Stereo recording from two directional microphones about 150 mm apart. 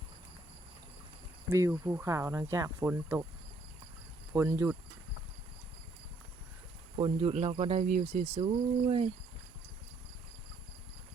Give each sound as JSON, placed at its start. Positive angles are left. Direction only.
{"t": 1.5, "sound": "speech", "side_deg": -20}
{"t": 4.3, "sound": "speech", "side_deg": -20}
{"t": 6.9, "sound": "speech", "side_deg": -40}